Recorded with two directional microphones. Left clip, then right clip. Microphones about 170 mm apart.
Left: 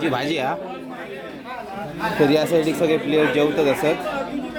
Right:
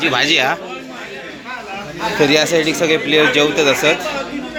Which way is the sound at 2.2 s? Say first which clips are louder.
Right 4 dB; 10° left (ahead or behind).